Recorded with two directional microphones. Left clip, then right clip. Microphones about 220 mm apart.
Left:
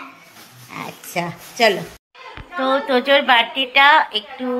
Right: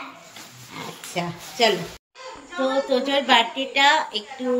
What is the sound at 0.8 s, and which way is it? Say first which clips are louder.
Dog: left 4 dB; 5° left (ahead or behind).